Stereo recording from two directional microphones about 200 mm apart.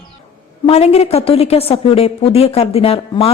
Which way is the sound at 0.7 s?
30° left (ahead or behind).